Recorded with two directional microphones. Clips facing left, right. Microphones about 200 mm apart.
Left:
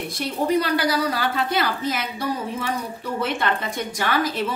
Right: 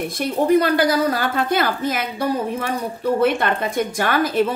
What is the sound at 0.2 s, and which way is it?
A woman's voice, 50° right (ahead or behind).